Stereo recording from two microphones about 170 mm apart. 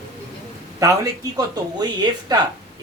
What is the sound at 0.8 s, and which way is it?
Speech, 20° right (ahead or behind).